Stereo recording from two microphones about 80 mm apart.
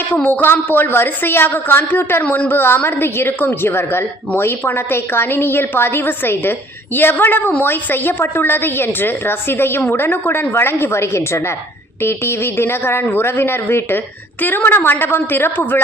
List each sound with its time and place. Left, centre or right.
0.1 s a woman's voice: left